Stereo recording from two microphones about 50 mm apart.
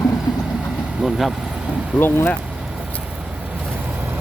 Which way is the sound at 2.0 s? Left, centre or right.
Left.